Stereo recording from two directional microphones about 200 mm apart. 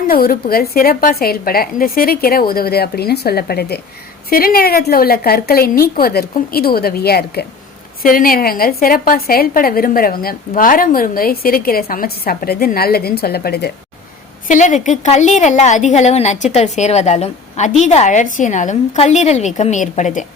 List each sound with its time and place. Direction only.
0.1 s a woman's voice: 45° left (ahead or behind)
14.4 s a woman's voice: 40° left (ahead or behind)